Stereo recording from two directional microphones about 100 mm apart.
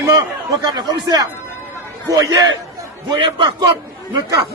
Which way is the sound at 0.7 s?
45° right (ahead or behind).